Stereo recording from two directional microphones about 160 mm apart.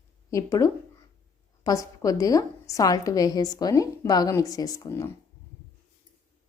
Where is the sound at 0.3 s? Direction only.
20° left (ahead or behind).